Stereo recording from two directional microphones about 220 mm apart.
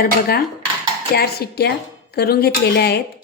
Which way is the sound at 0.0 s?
45° left (ahead or behind).